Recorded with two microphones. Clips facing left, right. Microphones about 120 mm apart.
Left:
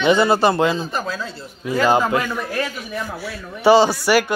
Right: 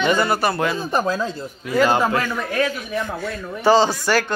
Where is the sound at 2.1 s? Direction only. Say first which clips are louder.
Left 1 dB; 15° left (ahead or behind).